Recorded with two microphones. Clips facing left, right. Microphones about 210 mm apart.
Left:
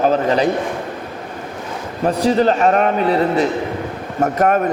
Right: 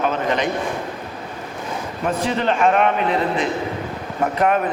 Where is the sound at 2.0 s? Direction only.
35° left (ahead or behind).